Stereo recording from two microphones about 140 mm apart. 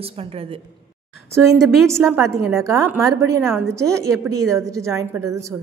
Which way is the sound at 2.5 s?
20° right (ahead or behind).